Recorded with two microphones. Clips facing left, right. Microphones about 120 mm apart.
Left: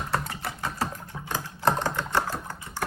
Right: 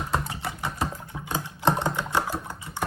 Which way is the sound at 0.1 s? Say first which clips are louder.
Even; 20° right (ahead or behind).